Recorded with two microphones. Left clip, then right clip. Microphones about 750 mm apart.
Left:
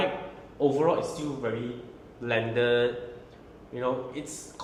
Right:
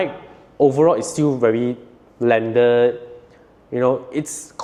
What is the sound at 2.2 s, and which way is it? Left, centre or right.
Speech, right.